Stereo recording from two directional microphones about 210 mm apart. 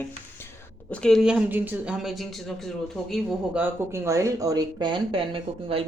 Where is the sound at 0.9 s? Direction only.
Centre (ahead or behind).